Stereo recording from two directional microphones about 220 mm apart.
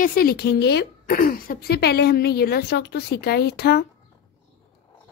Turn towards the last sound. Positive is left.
turn(degrees=45)  # may be behind; listen again after turning